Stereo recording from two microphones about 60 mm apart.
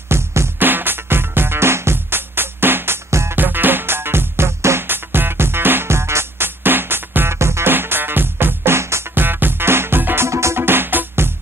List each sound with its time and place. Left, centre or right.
0.1 s music: right
0.6 s music: right
3.3 s music: right
7.7 s music: right
10.2 s music: right